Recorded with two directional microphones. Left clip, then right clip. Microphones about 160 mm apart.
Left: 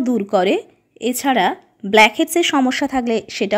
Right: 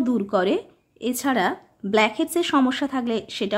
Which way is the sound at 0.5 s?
15° left (ahead or behind).